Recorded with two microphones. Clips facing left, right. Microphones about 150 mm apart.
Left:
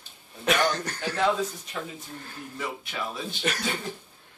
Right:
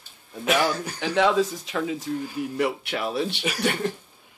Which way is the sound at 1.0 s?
90° right.